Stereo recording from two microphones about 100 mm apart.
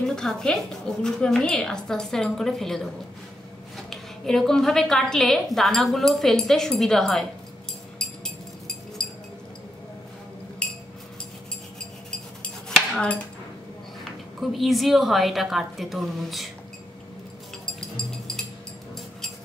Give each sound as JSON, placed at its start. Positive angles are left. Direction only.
{"t": 0.0, "sound": "a woman's voice", "side_deg": 5}
{"t": 8.0, "sound": "a sound", "side_deg": 5}
{"t": 9.0, "sound": "chink", "side_deg": 5}
{"t": 12.6, "sound": "cutlery", "side_deg": 5}
{"t": 14.4, "sound": "a woman's voice", "side_deg": 0}
{"t": 17.7, "sound": "music", "side_deg": 5}